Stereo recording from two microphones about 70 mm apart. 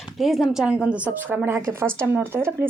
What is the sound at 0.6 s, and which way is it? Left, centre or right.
Speech, centre.